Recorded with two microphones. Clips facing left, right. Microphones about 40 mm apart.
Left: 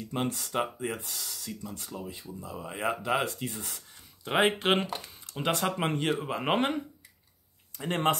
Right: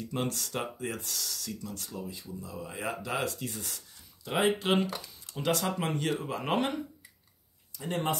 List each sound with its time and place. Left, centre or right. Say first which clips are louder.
0.1 s speech: left 3 dB; centre
2.0 s speech: even; left
7.7 s speech: left 4 dB; left